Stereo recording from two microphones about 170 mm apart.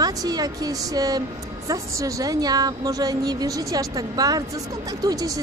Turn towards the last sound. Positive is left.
turn(degrees=-20)  # may be behind; listen again after turning